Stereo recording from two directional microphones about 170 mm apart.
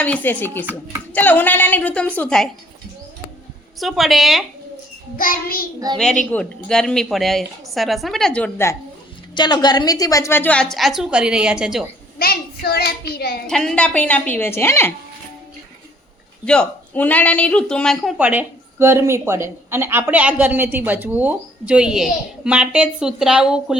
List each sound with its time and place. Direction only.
0.0 s a woman's voice: 10° left (ahead or behind)
0.6 s speech: 10° right (ahead or behind)
1.1 s a woman's voice: 10° left (ahead or behind)
3.8 s a woman's voice: centre (ahead or behind)
5.1 s child singing: 55° left (ahead or behind)
6.0 s a woman's voice: 5° left (ahead or behind)
9.3 s a woman's voice: 25° left (ahead or behind); by 11.9 s 5° right (ahead or behind)
12.2 s a child's voice: 65° left (ahead or behind)
13.5 s a woman's voice: 5° left (ahead or behind)
16.5 s a woman's voice: 5° left (ahead or behind)
18.2 s speech: 10° right (ahead or behind)